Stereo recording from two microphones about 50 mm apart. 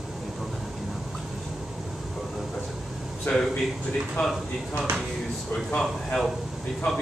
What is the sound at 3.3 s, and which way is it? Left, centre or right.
Speech, left.